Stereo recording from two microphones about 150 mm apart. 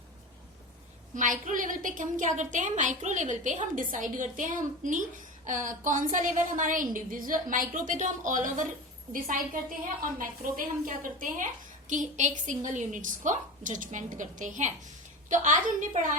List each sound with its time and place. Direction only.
1.1 s a woman's voice: 60° right (ahead or behind)
10.0 s a woman's voice: 70° right (ahead or behind)